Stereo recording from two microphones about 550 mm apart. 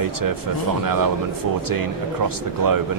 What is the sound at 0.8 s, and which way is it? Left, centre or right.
Speech, right.